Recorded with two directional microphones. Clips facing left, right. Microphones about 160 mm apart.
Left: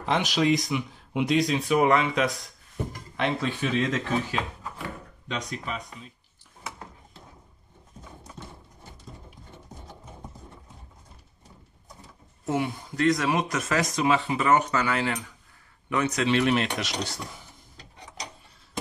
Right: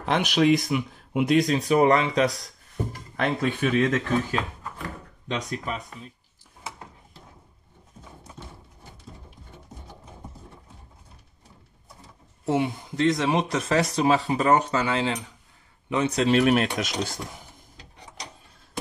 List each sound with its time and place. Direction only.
0.0 s speech: 60° right (ahead or behind); by 2.3 s 35° right (ahead or behind)
3.2 s speech: 55° right (ahead or behind)
12.4 s speech: 25° right (ahead or behind); by 17.2 s 50° right (ahead or behind)